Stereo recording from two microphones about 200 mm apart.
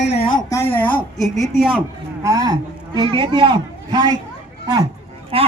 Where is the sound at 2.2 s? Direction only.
20° right (ahead or behind).